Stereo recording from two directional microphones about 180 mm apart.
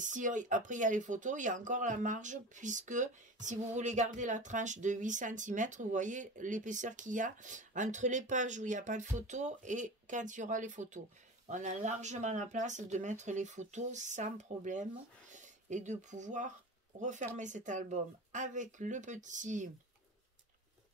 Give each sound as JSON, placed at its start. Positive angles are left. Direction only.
{"t": 0.0, "sound": "speech", "side_deg": -45}